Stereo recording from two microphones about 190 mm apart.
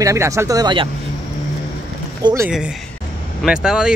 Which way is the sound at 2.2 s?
15° right (ahead or behind).